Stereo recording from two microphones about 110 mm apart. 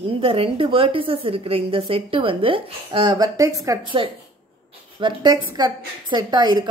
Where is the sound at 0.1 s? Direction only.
60° right (ahead or behind).